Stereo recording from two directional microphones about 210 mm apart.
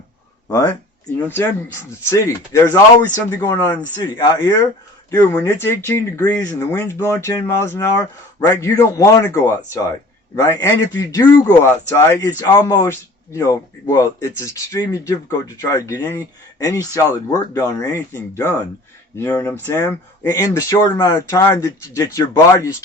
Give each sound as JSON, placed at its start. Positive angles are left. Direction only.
{"t": 0.4, "sound": "speech", "side_deg": 15}
{"t": 2.0, "sound": "speech", "side_deg": 15}